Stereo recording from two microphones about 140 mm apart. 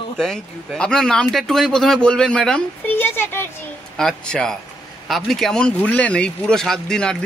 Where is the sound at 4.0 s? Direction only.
5° left (ahead or behind).